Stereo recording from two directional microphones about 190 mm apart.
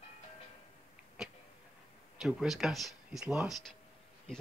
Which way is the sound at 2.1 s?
Centre (ahead or behind).